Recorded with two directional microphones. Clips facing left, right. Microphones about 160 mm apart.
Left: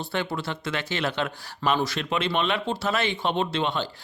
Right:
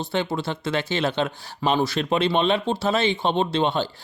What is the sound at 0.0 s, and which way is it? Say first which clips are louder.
Speech: right 4 dB; 20° right (ahead or behind).